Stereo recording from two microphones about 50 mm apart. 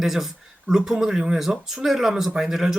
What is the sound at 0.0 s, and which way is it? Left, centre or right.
Speech, centre.